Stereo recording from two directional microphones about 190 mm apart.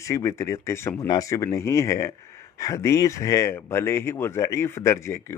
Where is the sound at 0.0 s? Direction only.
15° left (ahead or behind).